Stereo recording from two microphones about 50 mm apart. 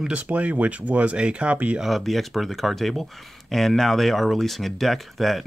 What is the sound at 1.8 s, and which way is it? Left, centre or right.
Speech, centre.